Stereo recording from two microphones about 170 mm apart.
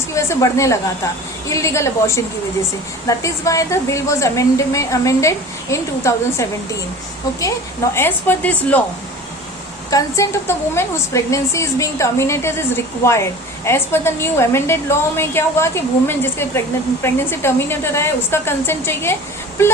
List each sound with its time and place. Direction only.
0.1 s a woman's voice: 15° left (ahead or behind)
7.9 s a woman's voice: 10° left (ahead or behind)
9.9 s a woman's voice: 15° left (ahead or behind)